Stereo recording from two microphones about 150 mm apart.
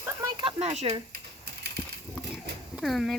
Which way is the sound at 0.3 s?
40° right (ahead or behind).